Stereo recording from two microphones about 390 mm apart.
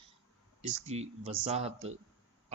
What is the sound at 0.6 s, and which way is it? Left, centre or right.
Speech, centre.